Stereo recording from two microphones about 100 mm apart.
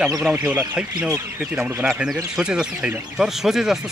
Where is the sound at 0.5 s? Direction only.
15° right (ahead or behind).